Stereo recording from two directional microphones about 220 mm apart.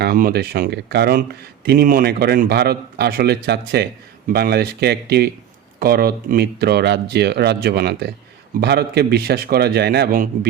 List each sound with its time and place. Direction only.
0.0 s speech: 40° right (ahead or behind)